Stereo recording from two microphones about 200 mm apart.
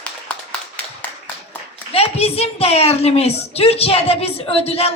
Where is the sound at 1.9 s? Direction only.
30° left (ahead or behind).